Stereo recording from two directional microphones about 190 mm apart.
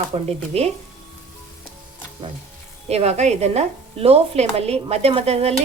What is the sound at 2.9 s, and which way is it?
Speech, 35° right (ahead or behind).